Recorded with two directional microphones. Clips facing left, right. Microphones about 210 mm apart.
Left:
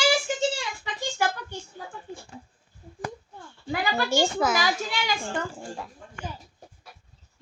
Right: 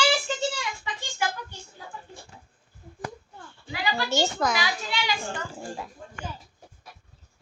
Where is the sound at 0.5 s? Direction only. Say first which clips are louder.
Even; 40° left (ahead or behind).